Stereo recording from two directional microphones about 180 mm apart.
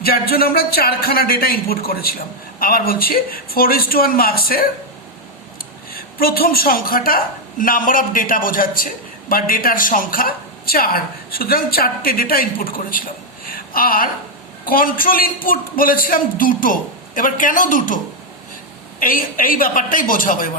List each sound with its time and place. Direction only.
0.0 s a man's voice: 55° left (ahead or behind)
5.9 s a woman's voice: 55° left (ahead or behind)